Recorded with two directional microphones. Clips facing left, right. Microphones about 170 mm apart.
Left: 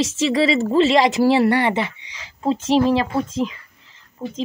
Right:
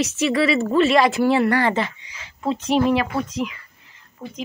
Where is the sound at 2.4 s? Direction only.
30° left (ahead or behind).